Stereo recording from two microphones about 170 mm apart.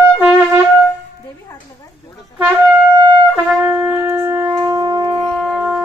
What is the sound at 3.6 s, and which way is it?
Shofar, 10° right (ahead or behind).